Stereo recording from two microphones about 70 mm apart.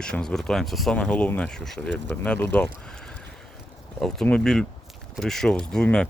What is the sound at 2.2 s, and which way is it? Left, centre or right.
Speech, centre.